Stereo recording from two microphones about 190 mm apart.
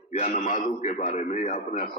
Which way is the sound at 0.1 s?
40° left (ahead or behind).